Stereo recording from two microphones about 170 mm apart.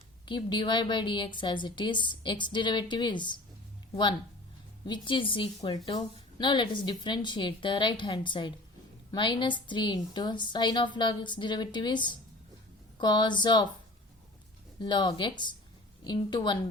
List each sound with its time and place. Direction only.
0.3 s a woman's voice: 30° left (ahead or behind)
4.9 s a woman's voice: 30° left (ahead or behind)
14.8 s a woman's voice: 25° left (ahead or behind)